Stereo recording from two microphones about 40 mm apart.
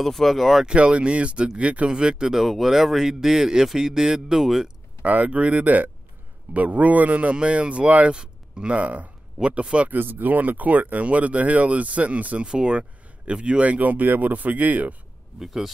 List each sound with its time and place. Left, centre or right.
0.0 s speech: centre
0.7 s speech: right
2.3 s a man's voice: centre
4.4 s speech: centre
5.0 s speech: right
9.8 s speech: right
12.4 s speech: right
15.3 s a man's voice: centre